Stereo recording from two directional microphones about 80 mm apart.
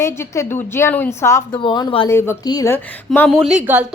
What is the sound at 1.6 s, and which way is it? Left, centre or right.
Speech, left.